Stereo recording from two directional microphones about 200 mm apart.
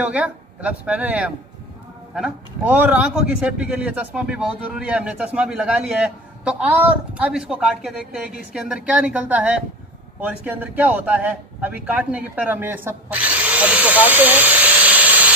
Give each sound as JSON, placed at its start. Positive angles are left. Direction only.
{"t": 0.0, "sound": "a man's voice", "side_deg": -5}